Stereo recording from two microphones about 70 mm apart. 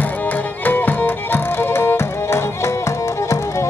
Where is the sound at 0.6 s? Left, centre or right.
Left.